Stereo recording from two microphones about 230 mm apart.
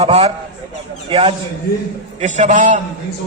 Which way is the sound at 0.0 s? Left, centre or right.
Right.